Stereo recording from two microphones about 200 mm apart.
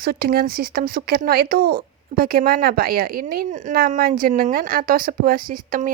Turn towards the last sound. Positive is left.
turn(degrees=-45)  # may be behind; listen again after turning